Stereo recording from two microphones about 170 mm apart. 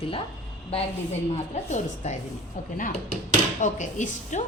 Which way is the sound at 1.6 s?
45° left (ahead or behind).